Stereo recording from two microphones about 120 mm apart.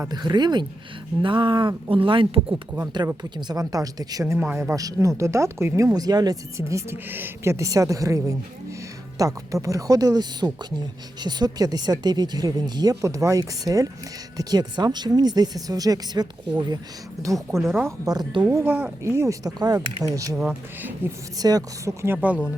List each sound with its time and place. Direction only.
0.1 s speech: 35° right (ahead or behind)
2.7 s speech: 35° right (ahead or behind)
17.3 s speech: 25° right (ahead or behind)
18.4 s speech: 20° right (ahead or behind)
21.0 s speech: 15° right (ahead or behind)
21.3 s speech: 30° right (ahead or behind)
22.0 s speech: 15° right (ahead or behind)